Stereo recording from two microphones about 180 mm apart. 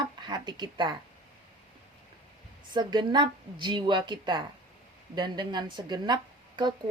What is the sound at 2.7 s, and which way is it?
A woman's voice, 25° right (ahead or behind).